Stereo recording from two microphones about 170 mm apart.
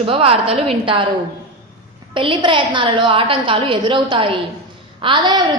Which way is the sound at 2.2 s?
30° right (ahead or behind).